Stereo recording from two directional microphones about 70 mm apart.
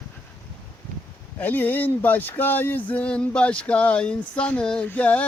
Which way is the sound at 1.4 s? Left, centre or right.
Left.